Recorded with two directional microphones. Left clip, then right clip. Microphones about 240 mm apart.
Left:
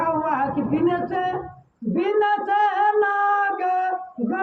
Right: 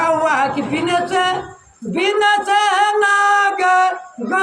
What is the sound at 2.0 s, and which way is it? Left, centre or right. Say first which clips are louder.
Singing: right 6 dB; right.